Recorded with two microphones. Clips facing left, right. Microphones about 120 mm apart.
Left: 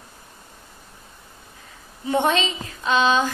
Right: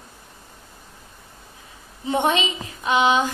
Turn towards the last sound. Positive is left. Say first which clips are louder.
# right 1 dB
turn(degrees=-15)  # may be behind; listen again after turning